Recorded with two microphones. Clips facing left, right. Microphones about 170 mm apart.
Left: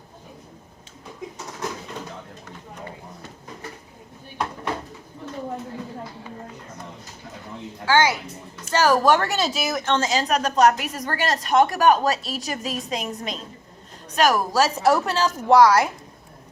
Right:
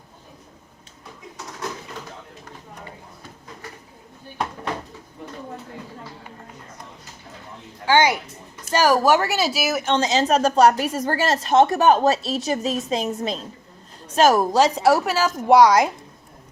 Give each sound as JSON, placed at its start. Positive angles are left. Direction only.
{"t": 7.9, "sound": "a woman's voice", "side_deg": -15}